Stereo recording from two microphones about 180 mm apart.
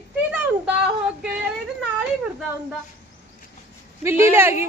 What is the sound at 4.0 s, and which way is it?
Speech, 15° right (ahead or behind).